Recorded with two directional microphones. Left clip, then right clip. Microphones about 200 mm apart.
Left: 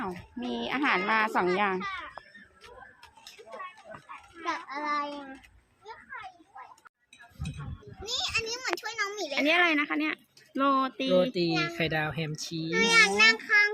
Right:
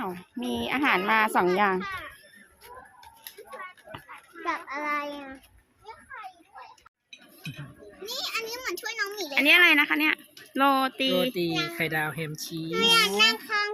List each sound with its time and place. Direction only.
0.0 s speech: 15° right (ahead or behind)
4.4 s a child's voice: 10° right (ahead or behind)
8.0 s a child's voice: 20° left (ahead or behind)
9.3 s speech: centre (ahead or behind)
11.8 s speech: 45° left (ahead or behind)
12.8 s a child's voice: 5° left (ahead or behind)